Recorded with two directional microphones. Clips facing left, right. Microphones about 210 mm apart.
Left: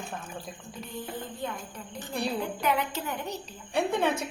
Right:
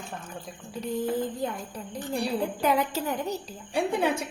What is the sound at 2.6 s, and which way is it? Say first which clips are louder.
Speech: right 4 dB; 40° right (ahead or behind).